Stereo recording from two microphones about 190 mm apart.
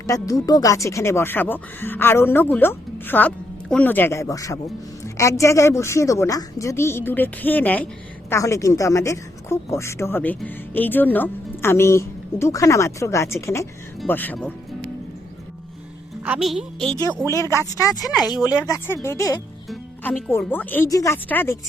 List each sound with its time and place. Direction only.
0.1 s speech: 15° left (ahead or behind)
16.2 s speech: 5° right (ahead or behind)
17.2 s speech: 15° left (ahead or behind)
19.7 s music: centre (ahead or behind)
20.3 s speech: 10° left (ahead or behind)